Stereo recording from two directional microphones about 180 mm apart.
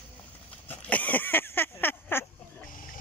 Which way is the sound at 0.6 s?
10° left (ahead or behind).